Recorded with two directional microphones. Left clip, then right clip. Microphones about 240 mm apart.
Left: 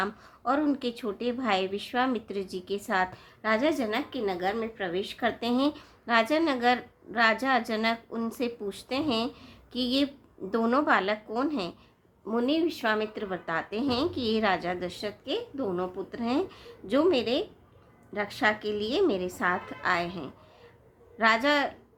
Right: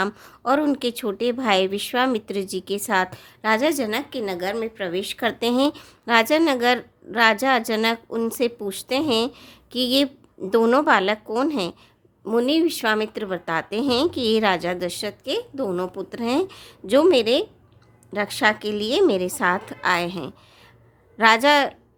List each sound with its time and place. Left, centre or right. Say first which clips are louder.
0.0 s a woman's voice: right 6 dB; right